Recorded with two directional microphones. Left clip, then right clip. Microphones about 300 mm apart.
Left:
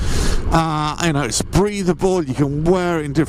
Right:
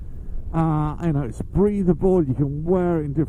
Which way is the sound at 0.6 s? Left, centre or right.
Centre.